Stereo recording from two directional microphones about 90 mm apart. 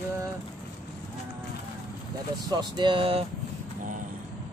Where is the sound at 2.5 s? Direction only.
65° right (ahead or behind); by 3.2 s 85° right.